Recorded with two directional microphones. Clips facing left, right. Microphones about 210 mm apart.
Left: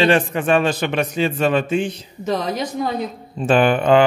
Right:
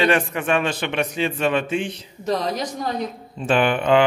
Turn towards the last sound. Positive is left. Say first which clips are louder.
# left 3 dB
turn(degrees=40)  # may be behind; listen again after turning